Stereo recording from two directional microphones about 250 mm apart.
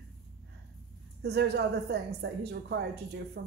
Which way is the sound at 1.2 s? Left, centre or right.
Right.